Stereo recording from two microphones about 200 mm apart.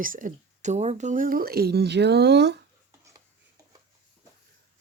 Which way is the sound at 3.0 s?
15° right (ahead or behind).